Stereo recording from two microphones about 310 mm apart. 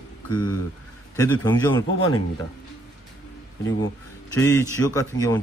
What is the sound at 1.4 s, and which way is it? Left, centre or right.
Speech, centre.